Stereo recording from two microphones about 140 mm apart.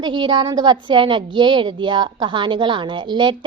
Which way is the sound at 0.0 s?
35° right (ahead or behind).